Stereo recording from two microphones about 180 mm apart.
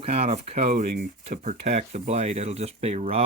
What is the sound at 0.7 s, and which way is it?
Speech, 55° right (ahead or behind).